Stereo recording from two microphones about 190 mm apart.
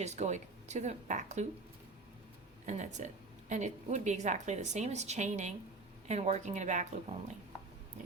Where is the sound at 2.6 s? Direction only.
40° right (ahead or behind).